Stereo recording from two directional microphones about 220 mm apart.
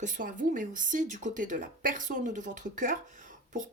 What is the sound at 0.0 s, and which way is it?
Speech, 35° right (ahead or behind).